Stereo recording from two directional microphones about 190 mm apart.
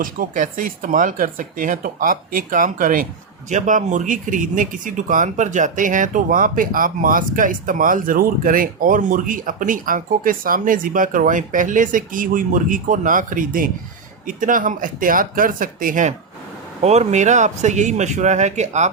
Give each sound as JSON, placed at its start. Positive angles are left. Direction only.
{"t": 0.0, "sound": "speech", "side_deg": -45}